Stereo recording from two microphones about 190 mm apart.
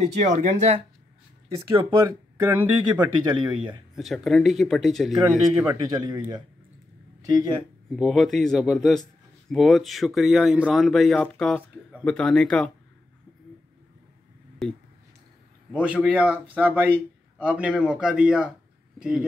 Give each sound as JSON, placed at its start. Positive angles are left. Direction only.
{"t": 0.2, "sound": "speech", "side_deg": -40}
{"t": 2.0, "sound": "speech", "side_deg": -20}
{"t": 3.9, "sound": "speech", "side_deg": 0}
{"t": 5.5, "sound": "speech", "side_deg": -15}
{"t": 7.9, "sound": "speech", "side_deg": 0}
{"t": 14.6, "sound": "a man's voice", "side_deg": 0}